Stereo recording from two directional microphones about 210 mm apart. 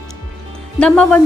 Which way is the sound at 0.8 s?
5° left (ahead or behind).